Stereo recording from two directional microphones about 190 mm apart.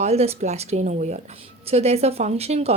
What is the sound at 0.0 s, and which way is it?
Speech, 35° right (ahead or behind).